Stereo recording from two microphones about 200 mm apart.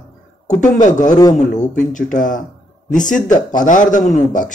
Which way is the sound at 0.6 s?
40° left (ahead or behind).